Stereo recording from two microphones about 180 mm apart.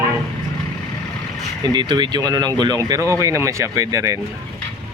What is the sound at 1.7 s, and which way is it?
Speech, 25° right (ahead or behind).